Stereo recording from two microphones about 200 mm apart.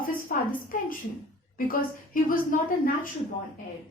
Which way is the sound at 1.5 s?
45° left (ahead or behind).